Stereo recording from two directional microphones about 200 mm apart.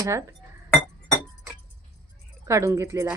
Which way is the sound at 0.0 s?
15° right (ahead or behind).